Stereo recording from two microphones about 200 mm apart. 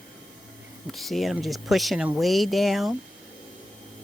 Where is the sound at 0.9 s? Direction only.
Centre (ahead or behind).